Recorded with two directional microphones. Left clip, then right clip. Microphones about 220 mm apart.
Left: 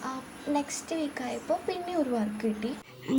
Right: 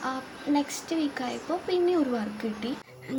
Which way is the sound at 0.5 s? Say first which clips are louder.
Right 3 dB; 25° left (ahead or behind).